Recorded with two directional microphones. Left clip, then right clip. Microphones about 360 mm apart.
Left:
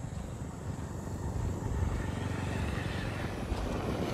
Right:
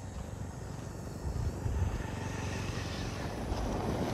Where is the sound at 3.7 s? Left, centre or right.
Right.